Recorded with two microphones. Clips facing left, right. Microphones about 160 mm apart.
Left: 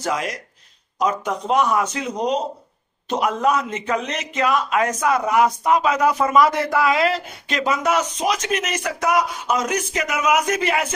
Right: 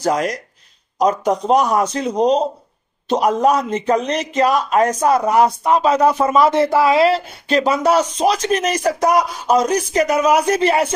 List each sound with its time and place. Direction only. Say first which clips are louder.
0.0 s a man's voice: right 6 dB; 40° right (ahead or behind)